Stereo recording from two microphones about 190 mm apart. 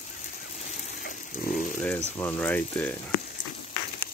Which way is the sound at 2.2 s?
10° left (ahead or behind).